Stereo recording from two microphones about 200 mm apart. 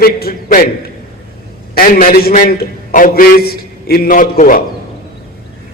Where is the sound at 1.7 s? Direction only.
45° left (ahead or behind).